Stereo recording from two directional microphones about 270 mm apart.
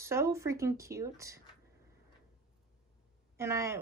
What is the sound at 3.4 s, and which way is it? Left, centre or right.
Speech, centre.